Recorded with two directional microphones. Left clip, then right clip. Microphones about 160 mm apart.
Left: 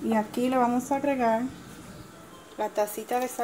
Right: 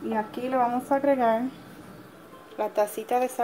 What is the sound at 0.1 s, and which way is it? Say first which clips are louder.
Speech: left 1 dB; 5° left (ahead or behind).